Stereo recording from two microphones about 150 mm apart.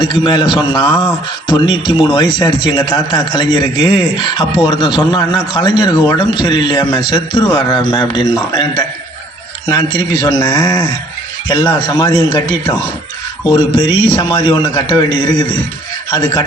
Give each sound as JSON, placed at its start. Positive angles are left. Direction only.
{"t": 0.0, "sound": "a man's voice", "side_deg": 30}
{"t": 13.6, "sound": "a man's voice", "side_deg": 30}
{"t": 13.9, "sound": "speech", "side_deg": -20}
{"t": 14.2, "sound": "a man's voice", "side_deg": 30}